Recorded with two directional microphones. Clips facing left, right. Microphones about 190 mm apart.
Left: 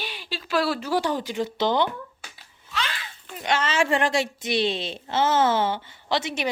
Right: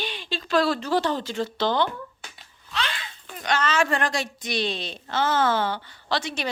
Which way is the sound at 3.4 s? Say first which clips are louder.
Even; 25° left (ahead or behind).